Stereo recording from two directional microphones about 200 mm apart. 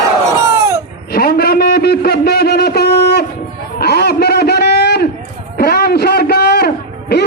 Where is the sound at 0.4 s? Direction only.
15° right (ahead or behind).